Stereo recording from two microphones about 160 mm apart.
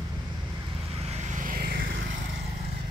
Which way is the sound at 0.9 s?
45° right (ahead or behind).